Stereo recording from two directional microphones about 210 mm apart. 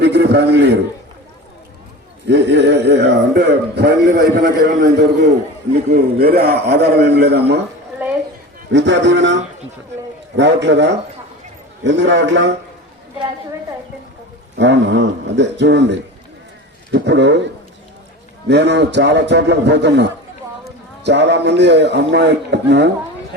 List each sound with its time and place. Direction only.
0.0 s a man's voice: 55° right (ahead or behind)
2.2 s a man's voice: 55° right (ahead or behind)
8.7 s a man's voice: 60° right (ahead or behind)
14.5 s a man's voice: 55° right (ahead or behind)